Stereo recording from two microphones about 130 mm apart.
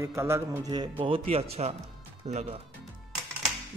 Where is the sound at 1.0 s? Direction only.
45° right (ahead or behind).